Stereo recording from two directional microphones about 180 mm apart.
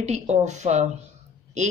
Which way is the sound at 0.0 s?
40° right (ahead or behind).